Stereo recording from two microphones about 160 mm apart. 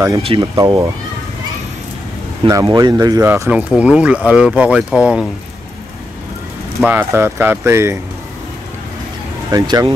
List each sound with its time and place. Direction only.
0.2 s speech: 30° right (ahead or behind)
2.4 s speech: 25° right (ahead or behind)
3.3 s speech: 10° right (ahead or behind)
6.8 s speech: 10° right (ahead or behind)
9.5 s speech: 25° right (ahead or behind)